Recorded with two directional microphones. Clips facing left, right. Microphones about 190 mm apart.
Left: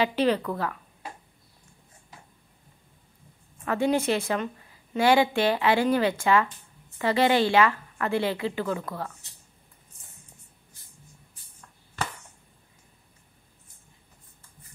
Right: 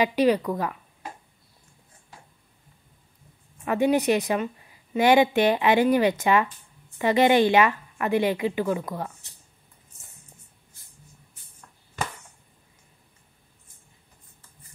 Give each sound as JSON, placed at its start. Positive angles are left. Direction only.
{"t": 0.0, "sound": "a woman's voice", "side_deg": -15}
{"t": 3.6, "sound": "a woman's voice", "side_deg": -15}